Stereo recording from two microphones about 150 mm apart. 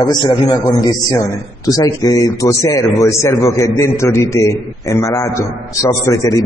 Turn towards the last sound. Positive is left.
turn(degrees=20)  # may be behind; listen again after turning